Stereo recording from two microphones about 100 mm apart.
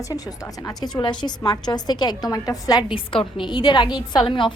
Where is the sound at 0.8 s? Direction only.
45° left (ahead or behind).